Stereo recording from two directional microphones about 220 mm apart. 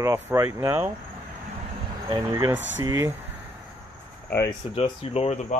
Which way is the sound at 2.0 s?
15° right (ahead or behind).